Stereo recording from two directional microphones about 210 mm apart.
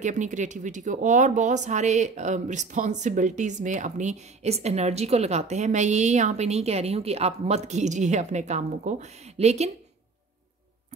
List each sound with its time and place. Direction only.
0.0 s speech: 35° right (ahead or behind)